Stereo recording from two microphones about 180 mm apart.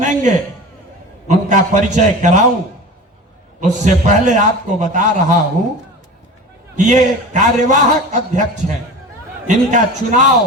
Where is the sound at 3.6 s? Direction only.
40° right (ahead or behind).